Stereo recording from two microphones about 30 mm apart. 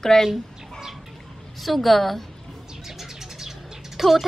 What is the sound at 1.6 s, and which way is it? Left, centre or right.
Speech, centre.